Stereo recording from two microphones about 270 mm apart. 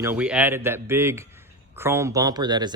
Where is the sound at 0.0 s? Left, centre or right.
Centre.